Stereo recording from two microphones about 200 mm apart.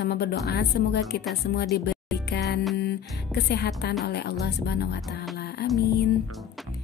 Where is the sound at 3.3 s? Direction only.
55° left (ahead or behind).